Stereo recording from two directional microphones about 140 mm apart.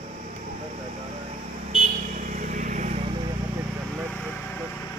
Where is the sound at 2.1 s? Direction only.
65° right (ahead or behind).